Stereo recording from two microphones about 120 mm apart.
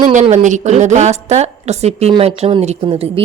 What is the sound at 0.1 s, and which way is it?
A woman's voice, 90° right.